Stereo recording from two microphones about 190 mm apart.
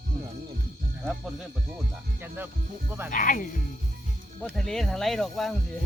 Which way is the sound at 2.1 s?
10° right (ahead or behind).